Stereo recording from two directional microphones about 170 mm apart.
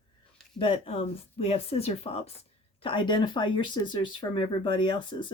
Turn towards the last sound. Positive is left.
turn(degrees=25)  # may be behind; listen again after turning